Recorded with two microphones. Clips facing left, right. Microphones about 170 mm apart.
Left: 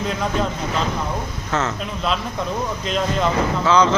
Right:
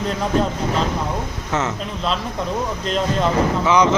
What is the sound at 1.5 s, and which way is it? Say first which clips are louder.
Speech: even; 15° right (ahead or behind).